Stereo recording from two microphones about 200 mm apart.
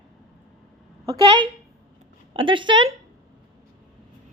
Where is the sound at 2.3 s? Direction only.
25° right (ahead or behind).